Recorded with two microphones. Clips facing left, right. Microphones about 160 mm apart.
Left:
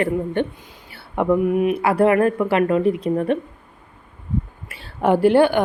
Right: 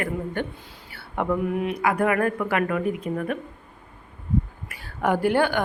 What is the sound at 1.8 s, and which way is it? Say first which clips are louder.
Speech: left 5 dB; 30° left (ahead or behind).